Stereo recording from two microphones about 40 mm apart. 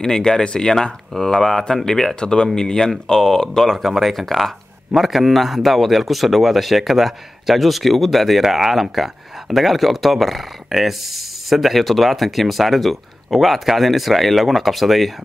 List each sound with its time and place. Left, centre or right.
0.0 s speech: centre